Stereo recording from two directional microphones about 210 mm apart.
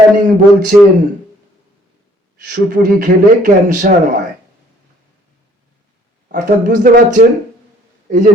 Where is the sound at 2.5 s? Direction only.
40° right (ahead or behind).